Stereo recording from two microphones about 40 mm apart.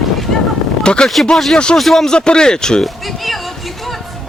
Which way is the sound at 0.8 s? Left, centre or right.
Left.